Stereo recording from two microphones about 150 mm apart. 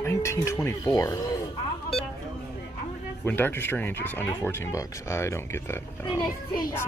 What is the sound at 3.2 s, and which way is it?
Speech, 15° left (ahead or behind).